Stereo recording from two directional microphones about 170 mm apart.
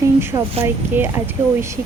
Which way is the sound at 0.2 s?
15° right (ahead or behind).